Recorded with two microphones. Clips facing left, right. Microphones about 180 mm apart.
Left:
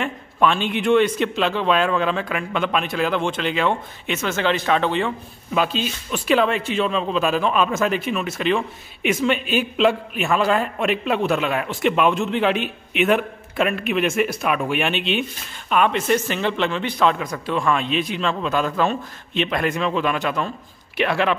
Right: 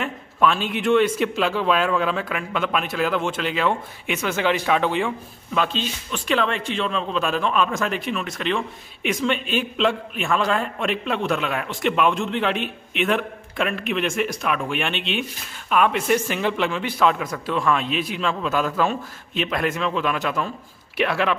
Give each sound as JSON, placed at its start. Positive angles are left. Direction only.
{"t": 0.0, "sound": "a man's voice", "side_deg": 0}
{"t": 5.5, "sound": "a man's voice", "side_deg": 10}